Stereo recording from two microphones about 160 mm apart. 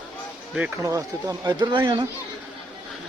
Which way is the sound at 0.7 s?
20° right (ahead or behind).